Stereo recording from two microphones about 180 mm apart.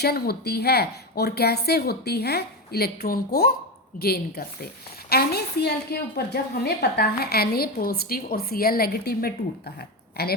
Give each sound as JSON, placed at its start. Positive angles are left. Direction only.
{"t": 0.0, "sound": "a woman's voice", "side_deg": 60}